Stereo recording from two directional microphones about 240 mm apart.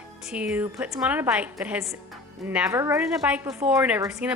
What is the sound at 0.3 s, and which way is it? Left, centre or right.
A woman's voice, centre.